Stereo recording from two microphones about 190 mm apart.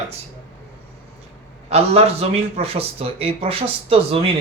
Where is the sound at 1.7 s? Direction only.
35° right (ahead or behind).